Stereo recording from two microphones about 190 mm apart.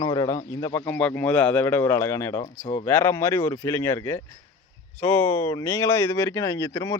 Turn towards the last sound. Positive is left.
turn(degrees=15)  # may be behind; listen again after turning